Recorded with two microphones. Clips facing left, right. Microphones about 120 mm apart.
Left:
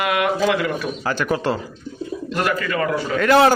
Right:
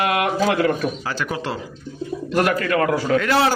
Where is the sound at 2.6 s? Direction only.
65° right (ahead or behind).